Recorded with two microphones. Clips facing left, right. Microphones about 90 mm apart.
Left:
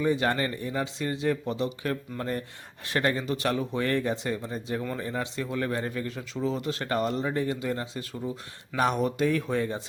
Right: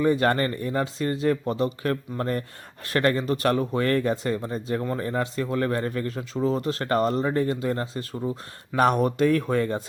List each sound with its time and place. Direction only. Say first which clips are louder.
0.0 s speech: right 4 dB; 50° right (ahead or behind)